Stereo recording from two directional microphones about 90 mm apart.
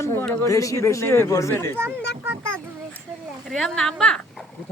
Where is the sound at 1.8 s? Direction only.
25° right (ahead or behind).